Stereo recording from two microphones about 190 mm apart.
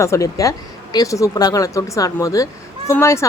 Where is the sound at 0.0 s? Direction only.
15° left (ahead or behind).